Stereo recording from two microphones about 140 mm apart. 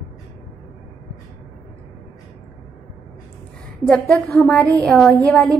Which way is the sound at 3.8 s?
5° left (ahead or behind).